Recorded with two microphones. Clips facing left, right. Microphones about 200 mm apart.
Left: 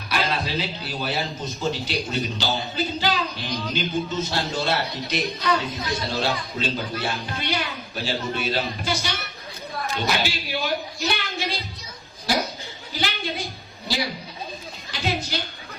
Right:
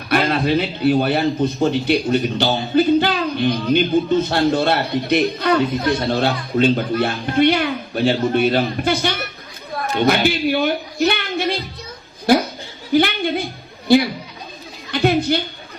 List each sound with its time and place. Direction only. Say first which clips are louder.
0.1 s a man's voice: right 9 dB; 55° right (ahead or behind)